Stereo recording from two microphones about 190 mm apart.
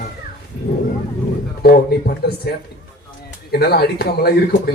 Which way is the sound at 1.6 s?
55° left (ahead or behind).